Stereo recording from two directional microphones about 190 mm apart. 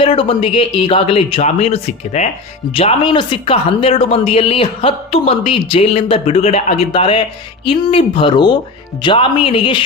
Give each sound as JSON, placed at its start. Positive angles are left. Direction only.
{"t": 0.0, "sound": "speech", "side_deg": 30}